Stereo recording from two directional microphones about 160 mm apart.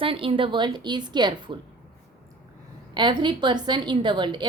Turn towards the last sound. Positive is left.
turn(degrees=-30)  # may be behind; listen again after turning